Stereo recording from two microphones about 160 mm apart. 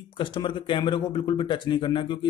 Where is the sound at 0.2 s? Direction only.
30° left (ahead or behind).